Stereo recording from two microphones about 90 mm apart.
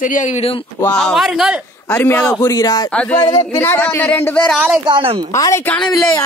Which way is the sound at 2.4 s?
45° left (ahead or behind).